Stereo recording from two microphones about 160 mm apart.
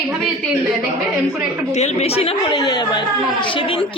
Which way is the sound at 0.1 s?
Centre (ahead or behind).